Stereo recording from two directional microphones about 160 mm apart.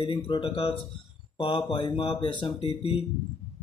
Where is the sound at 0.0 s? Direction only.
30° left (ahead or behind).